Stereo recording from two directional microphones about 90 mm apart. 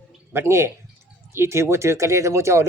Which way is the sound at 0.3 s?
30° right (ahead or behind).